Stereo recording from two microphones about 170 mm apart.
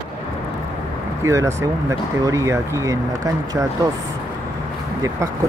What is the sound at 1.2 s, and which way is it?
Speech, 15° right (ahead or behind).